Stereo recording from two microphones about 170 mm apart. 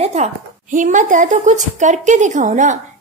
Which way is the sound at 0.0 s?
40° right (ahead or behind).